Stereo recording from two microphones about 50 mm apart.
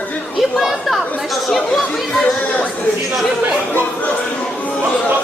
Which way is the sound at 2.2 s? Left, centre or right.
Left.